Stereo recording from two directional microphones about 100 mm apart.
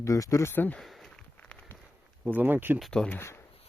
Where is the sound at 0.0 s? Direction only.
30° left (ahead or behind).